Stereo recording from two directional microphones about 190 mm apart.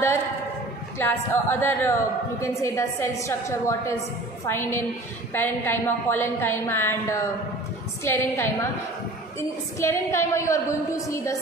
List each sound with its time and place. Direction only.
0.9 s a woman's voice: 10° left (ahead or behind)
9.8 s a woman's voice: 15° left (ahead or behind)